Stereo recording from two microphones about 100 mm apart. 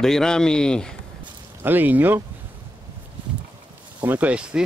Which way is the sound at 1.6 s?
20° right (ahead or behind).